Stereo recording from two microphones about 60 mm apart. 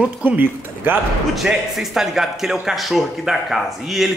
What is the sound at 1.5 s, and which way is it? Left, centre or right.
Speech, centre.